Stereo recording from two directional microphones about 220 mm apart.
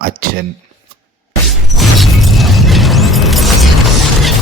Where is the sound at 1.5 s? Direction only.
Centre (ahead or behind).